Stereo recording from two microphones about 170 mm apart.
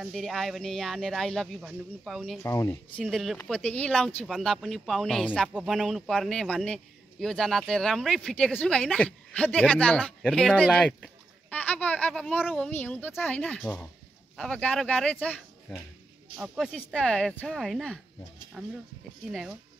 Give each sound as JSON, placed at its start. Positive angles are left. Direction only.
{"t": 0.0, "sound": "a man's voice", "side_deg": 0}
{"t": 2.4, "sound": "speech", "side_deg": 15}
{"t": 3.0, "sound": "a man's voice", "side_deg": 0}
{"t": 16.3, "sound": "a man's voice", "side_deg": -5}